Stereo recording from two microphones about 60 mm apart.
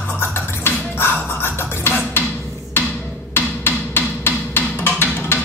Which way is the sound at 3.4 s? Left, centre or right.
Left.